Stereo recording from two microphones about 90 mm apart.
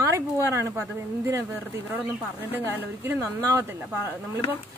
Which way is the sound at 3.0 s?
35° right (ahead or behind).